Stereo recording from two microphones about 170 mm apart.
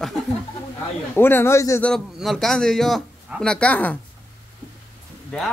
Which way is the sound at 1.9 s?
Centre (ahead or behind).